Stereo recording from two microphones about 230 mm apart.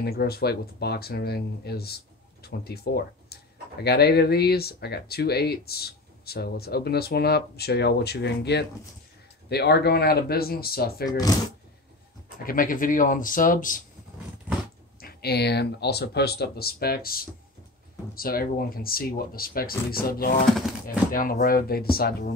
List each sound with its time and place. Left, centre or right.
0.0 s speech: left
11.1 s speech: centre
12.4 s speech: left
15.0 s speech: left